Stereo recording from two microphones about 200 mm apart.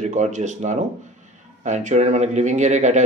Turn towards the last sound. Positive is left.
turn(degrees=-35)  # may be behind; listen again after turning